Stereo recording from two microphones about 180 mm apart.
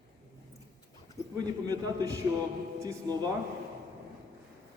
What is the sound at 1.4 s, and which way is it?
A man's voice, 20° right (ahead or behind).